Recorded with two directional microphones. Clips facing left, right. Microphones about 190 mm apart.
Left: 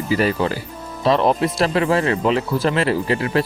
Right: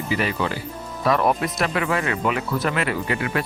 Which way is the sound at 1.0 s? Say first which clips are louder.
Left 4 dB; 25° left (ahead or behind).